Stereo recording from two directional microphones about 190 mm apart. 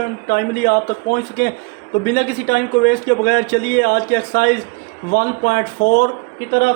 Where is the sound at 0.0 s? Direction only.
55° left (ahead or behind).